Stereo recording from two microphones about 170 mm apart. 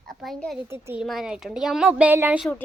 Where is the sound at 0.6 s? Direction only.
15° right (ahead or behind).